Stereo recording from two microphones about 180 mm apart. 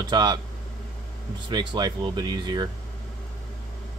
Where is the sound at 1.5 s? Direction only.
25° right (ahead or behind).